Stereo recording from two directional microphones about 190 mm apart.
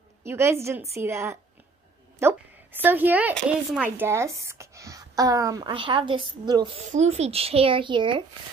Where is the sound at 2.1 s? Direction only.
10° right (ahead or behind).